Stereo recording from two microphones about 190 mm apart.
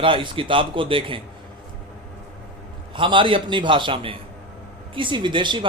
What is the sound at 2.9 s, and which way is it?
Speech, 25° right (ahead or behind).